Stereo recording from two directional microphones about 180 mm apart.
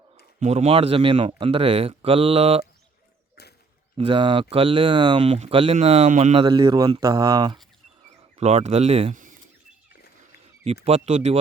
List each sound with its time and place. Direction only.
0.3 s speech: 40° right (ahead or behind)
3.9 s speech: 30° right (ahead or behind)
8.4 s speech: 35° right (ahead or behind)
10.8 s speech: 35° right (ahead or behind)